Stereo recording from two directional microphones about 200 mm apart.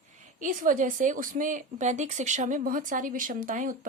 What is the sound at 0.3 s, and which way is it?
Speech, 40° right (ahead or behind).